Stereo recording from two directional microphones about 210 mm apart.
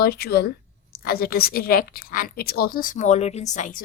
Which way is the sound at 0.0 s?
45° left (ahead or behind).